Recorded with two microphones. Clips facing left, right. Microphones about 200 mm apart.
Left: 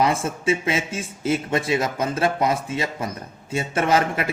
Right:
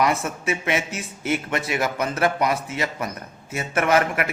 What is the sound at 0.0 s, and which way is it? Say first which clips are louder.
Speech: left 1 dB; 25° left (ahead or behind).